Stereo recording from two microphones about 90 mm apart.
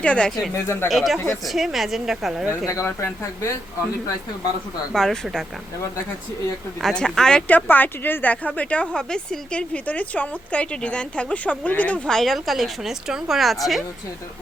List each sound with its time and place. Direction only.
0.0 s speech: 10° left (ahead or behind)
0.5 s speech: 30° left (ahead or behind)
0.9 s a woman's voice: centre (ahead or behind)
2.5 s speech: 30° left (ahead or behind)
4.9 s a woman's voice: 5° left (ahead or behind)
6.8 s speech: 5° left (ahead or behind)